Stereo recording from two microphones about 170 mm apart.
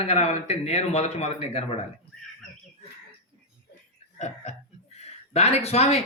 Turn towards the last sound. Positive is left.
turn(degrees=40)  # may be behind; listen again after turning